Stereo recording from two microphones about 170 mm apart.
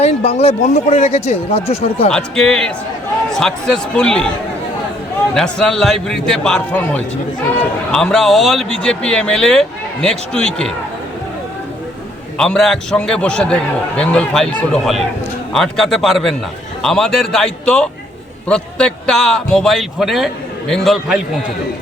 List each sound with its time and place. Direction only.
0.0 s speech: 35° left (ahead or behind)
2.0 s a man's voice: 5° left (ahead or behind)
5.3 s a man's voice: 5° left (ahead or behind)
12.4 s a man's voice: 5° left (ahead or behind)